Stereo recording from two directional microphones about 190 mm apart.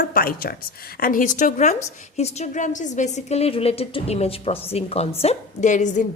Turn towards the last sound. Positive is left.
turn(degrees=40)  # may be behind; listen again after turning